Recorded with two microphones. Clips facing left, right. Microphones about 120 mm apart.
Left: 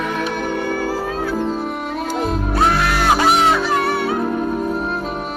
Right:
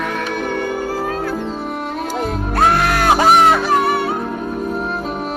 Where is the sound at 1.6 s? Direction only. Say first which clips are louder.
Even; centre (ahead or behind).